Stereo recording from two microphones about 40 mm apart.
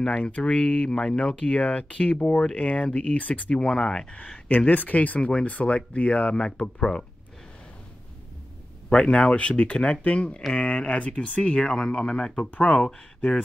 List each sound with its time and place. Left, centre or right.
0.0 s speech: left
3.5 s speech: left
4.5 s speech: left
6.6 s speech: centre
8.8 s speech: left
12.4 s speech: left
12.6 s speech: left